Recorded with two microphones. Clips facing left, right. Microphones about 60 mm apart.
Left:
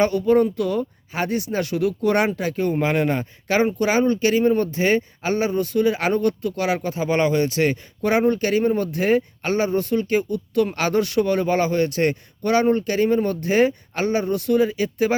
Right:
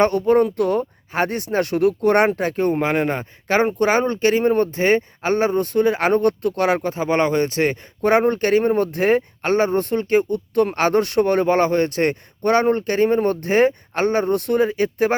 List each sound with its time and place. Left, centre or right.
0.0 s speech: right
2.7 s speech: right
3.6 s speech: right